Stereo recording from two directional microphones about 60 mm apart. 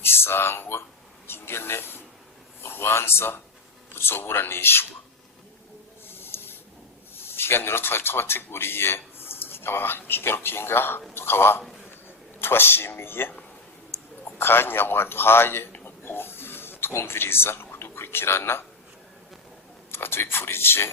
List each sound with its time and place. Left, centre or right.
0.0 s speech: left
1.3 s a sound: left
2.6 s a man's voice: left
6.1 s snort: left
7.2 s a man's voice: left
15.8 s a sound: left
19.9 s a man's voice: left